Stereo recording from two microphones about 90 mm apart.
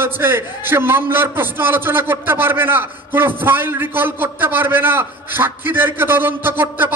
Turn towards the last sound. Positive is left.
turn(degrees=-25)  # may be behind; listen again after turning